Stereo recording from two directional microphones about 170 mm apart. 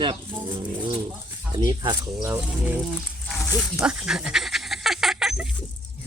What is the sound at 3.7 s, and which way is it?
Dog, 5° right (ahead or behind).